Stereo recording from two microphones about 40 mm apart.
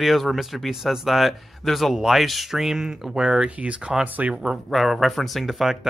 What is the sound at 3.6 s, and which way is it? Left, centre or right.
Speech, right.